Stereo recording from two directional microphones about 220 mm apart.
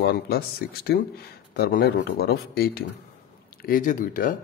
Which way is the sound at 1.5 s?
45° left (ahead or behind).